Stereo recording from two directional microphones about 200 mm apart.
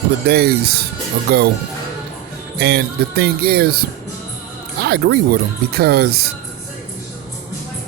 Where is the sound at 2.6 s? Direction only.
55° right (ahead or behind).